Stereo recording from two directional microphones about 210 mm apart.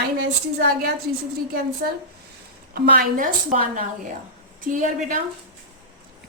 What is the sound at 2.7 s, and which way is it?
Speech, 40° right (ahead or behind).